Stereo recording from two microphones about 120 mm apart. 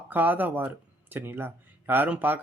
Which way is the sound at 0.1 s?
15° right (ahead or behind).